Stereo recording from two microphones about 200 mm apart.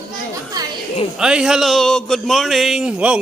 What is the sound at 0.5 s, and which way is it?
Chatter, 20° right (ahead or behind).